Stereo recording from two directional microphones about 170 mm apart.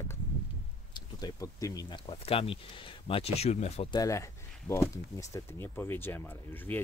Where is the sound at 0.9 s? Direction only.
20° left (ahead or behind).